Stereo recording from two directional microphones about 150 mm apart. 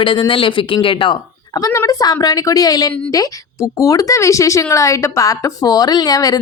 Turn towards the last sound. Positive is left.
turn(degrees=25)  # may be behind; listen again after turning